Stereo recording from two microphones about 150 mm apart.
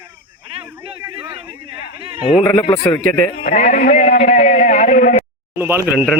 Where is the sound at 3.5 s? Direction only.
55° left (ahead or behind).